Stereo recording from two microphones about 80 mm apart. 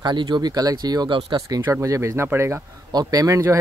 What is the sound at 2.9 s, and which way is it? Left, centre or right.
Speech, right.